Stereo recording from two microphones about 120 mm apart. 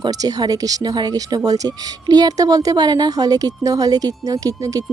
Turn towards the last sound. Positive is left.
turn(degrees=-30)  # may be behind; listen again after turning